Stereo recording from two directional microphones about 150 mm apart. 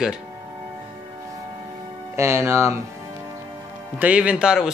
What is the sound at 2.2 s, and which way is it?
Speech, 15° right (ahead or behind).